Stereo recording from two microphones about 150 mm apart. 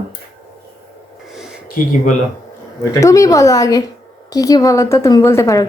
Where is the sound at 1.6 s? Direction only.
65° left (ahead or behind).